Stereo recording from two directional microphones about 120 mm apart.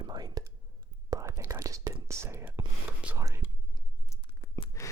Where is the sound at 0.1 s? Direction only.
35° right (ahead or behind).